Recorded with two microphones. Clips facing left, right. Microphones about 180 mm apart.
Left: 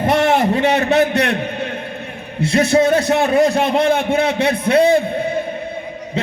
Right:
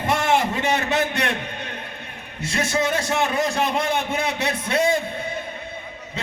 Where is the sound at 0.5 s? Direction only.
25° left (ahead or behind).